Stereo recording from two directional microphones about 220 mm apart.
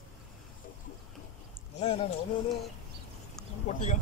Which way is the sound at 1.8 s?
25° left (ahead or behind).